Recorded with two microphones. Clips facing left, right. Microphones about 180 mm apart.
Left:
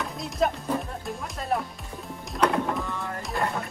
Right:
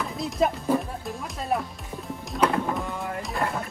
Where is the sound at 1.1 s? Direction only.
Centre (ahead or behind).